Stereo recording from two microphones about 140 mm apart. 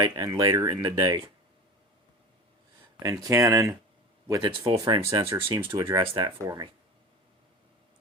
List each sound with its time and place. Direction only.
0.0 s speech: 25° right (ahead or behind)
3.0 s speech: 25° right (ahead or behind)
4.9 s speech: 40° right (ahead or behind)